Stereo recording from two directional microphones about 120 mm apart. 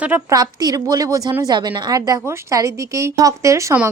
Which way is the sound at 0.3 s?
30° right (ahead or behind).